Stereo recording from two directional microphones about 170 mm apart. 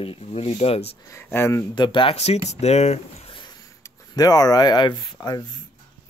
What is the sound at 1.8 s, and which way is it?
Speech, 30° left (ahead or behind).